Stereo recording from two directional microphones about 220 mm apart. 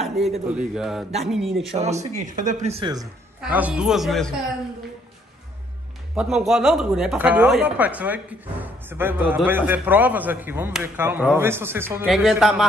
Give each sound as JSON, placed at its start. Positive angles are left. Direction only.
{"t": 0.0, "sound": "a sound", "side_deg": 0}
{"t": 0.5, "sound": "a man's voice", "side_deg": -5}
{"t": 1.7, "sound": "speech", "side_deg": -30}
{"t": 3.3, "sound": "a man's voice", "side_deg": -5}
{"t": 6.1, "sound": "a man's voice", "side_deg": 0}